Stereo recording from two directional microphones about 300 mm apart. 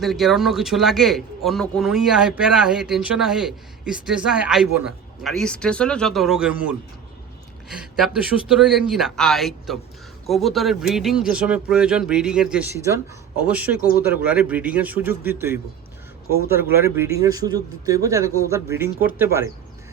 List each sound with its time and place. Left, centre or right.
0.0 s a man's voice: centre